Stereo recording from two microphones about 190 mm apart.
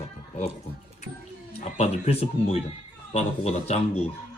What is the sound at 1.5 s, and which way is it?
A man's voice, 35° left (ahead or behind).